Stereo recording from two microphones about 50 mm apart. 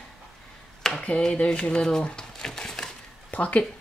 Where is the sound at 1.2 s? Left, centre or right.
Centre.